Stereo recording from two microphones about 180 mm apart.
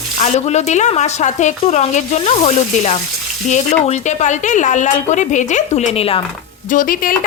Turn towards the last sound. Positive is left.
turn(degrees=50)  # may be behind; listen again after turning